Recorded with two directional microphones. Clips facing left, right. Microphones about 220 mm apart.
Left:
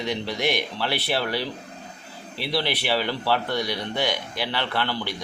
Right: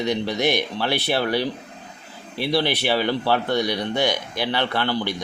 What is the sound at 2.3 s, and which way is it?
Speech, 50° right (ahead or behind).